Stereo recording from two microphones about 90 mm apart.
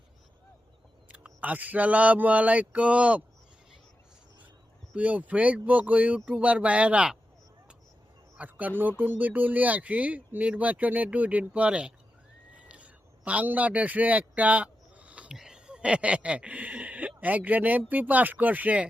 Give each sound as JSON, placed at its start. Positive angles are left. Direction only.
{"t": 1.0, "sound": "speech", "side_deg": -15}
{"t": 4.9, "sound": "speech", "side_deg": -15}
{"t": 8.4, "sound": "speech", "side_deg": -20}
{"t": 12.5, "sound": "a sound", "side_deg": -15}
{"t": 15.4, "sound": "speech", "side_deg": -10}